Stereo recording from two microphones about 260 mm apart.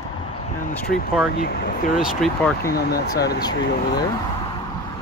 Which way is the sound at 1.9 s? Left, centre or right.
Centre.